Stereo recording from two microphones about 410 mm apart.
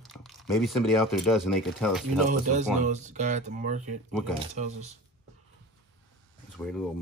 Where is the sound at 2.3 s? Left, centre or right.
Centre.